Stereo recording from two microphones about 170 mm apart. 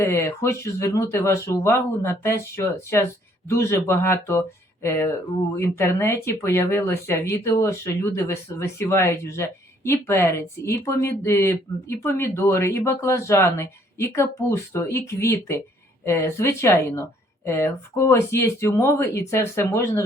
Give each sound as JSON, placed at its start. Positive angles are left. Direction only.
{"t": 0.0, "sound": "speech", "side_deg": 15}